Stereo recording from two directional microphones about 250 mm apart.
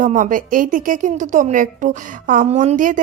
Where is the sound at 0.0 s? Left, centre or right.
Right.